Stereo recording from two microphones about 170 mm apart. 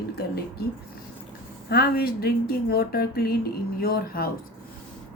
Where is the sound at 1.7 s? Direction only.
65° left (ahead or behind).